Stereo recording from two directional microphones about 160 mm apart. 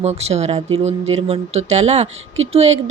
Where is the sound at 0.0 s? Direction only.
40° right (ahead or behind).